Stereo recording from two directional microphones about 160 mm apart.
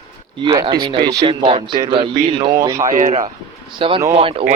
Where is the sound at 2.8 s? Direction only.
50° right (ahead or behind).